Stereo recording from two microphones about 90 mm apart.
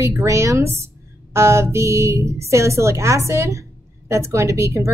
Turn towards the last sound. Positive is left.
turn(degrees=-35)  # may be behind; listen again after turning